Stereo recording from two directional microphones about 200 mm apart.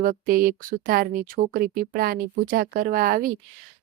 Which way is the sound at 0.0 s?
45° right (ahead or behind).